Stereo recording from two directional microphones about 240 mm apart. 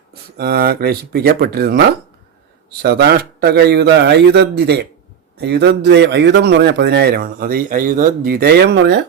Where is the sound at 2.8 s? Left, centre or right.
Right.